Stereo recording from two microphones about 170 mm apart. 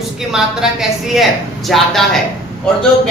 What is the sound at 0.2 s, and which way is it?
A woman's voice, 5° right (ahead or behind).